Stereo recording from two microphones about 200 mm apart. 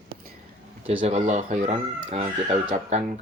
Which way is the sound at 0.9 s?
30° right (ahead or behind).